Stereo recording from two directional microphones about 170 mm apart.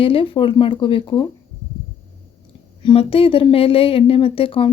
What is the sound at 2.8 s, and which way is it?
Speech, 35° left (ahead or behind).